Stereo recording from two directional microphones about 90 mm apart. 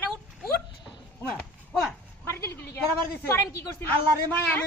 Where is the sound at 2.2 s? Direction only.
30° left (ahead or behind).